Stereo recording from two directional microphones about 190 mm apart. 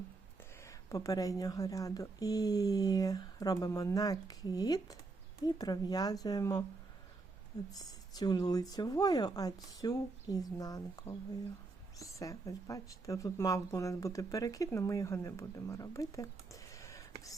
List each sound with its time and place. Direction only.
0.6 s speech: 15° left (ahead or behind)
7.7 s speech: 20° left (ahead or behind)